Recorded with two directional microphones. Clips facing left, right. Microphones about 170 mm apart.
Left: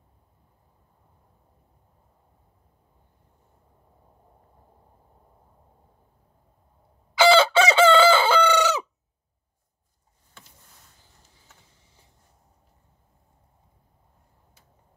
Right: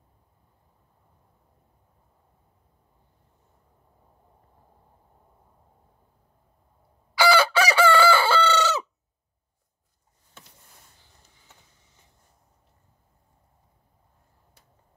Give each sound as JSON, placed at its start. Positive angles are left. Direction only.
{"t": 7.2, "sound": "chicken", "side_deg": 25}